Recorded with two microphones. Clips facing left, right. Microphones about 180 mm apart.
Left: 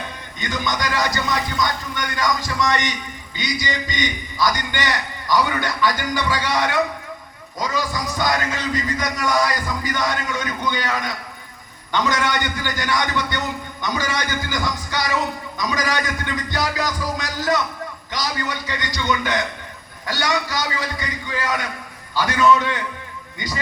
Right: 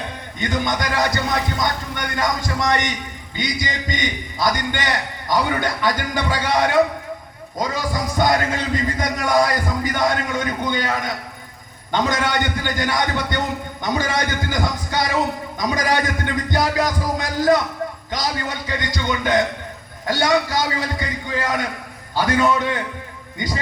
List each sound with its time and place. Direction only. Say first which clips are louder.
0.4 s a man's voice: right 2 dB; 55° right (ahead or behind)